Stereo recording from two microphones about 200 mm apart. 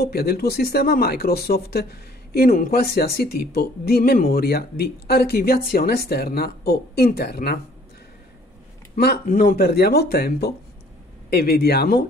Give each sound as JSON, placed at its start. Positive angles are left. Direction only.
{"t": 0.0, "sound": "speech", "side_deg": 50}
{"t": 8.9, "sound": "speech", "side_deg": 50}